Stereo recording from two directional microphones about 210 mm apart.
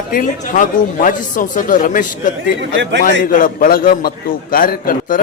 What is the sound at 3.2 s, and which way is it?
A man's voice, 40° left (ahead or behind).